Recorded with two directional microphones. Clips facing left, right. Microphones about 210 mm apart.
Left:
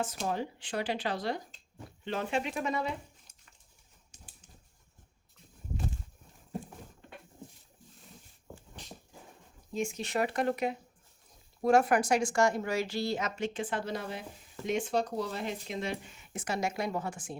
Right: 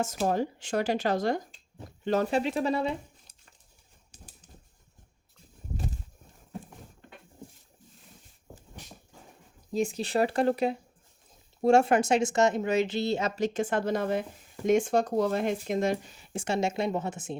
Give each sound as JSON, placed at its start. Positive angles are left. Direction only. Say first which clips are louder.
{"t": 0.3, "sound": "speech", "louder": "right 6 dB", "side_deg": -45}
{"t": 9.7, "sound": "a woman's voice", "louder": "right 5 dB", "side_deg": -35}